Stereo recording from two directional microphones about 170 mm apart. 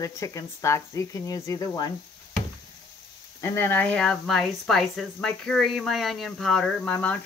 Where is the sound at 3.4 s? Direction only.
15° left (ahead or behind).